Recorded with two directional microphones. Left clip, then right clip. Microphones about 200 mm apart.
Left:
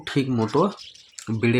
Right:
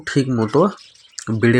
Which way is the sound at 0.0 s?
10° right (ahead or behind).